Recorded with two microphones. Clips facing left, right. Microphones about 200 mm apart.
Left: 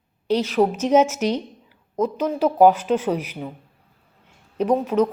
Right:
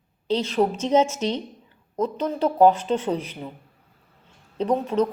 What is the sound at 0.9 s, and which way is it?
Speech, 5° left (ahead or behind).